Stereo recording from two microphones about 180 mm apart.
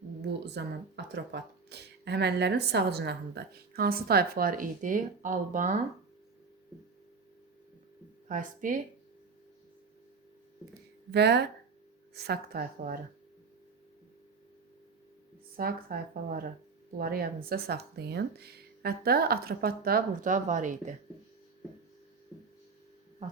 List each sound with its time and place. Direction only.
0.2 s speech: 65° right (ahead or behind); by 5.7 s 45° right (ahead or behind)
8.3 s speech: 45° right (ahead or behind)
11.1 s speech: 65° right (ahead or behind)
15.5 s speech: 55° right (ahead or behind)